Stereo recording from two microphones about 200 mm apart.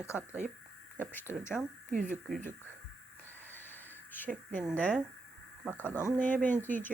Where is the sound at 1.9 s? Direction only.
40° right (ahead or behind).